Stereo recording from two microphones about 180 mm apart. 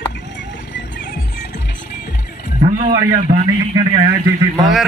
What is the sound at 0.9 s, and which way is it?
Music, 70° left (ahead or behind).